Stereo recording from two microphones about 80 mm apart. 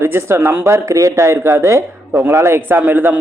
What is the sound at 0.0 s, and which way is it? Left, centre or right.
A man's voice, right.